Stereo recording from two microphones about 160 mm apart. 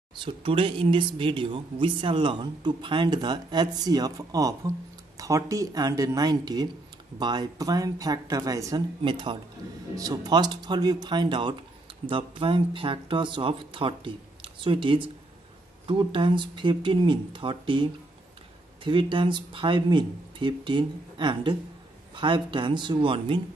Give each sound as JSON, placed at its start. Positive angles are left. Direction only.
{"t": 0.1, "sound": "speech", "side_deg": -30}
{"t": 18.9, "sound": "speech", "side_deg": -30}